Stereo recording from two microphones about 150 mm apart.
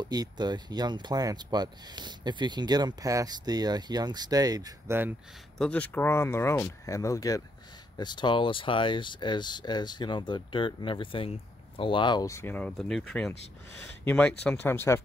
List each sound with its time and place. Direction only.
0.0 s speech: 25° right (ahead or behind)
5.6 s speech: 10° left (ahead or behind)